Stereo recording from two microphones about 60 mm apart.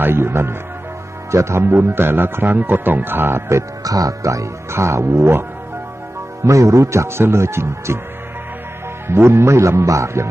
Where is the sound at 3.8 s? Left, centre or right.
Right.